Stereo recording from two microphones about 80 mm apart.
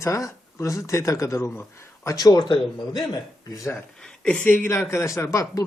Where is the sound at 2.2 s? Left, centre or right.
Left.